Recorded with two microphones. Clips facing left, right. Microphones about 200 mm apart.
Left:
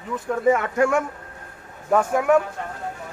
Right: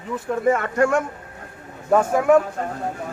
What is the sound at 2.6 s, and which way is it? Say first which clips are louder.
Speech: right 5 dB; 40° right (ahead or behind).